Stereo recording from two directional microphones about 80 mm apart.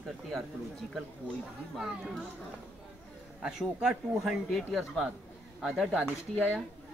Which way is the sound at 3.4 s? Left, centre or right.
Centre.